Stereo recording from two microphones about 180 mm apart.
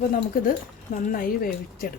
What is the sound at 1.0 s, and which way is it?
Speech, 55° left (ahead or behind).